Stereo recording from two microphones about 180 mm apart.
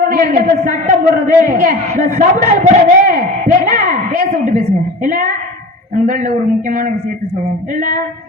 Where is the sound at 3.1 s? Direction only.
40° right (ahead or behind).